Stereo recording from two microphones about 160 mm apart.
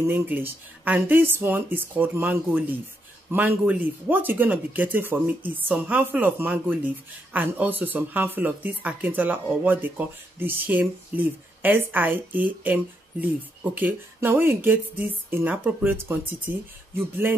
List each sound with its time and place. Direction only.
0.0 s speech: 10° right (ahead or behind)